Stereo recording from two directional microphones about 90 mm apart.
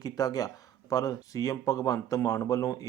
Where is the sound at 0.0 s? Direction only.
45° left (ahead or behind).